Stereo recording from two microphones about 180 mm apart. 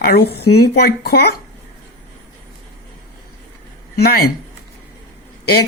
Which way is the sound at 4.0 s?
60° left (ahead or behind).